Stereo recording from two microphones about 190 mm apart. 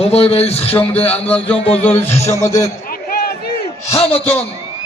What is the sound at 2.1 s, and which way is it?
Speech, 35° left (ahead or behind).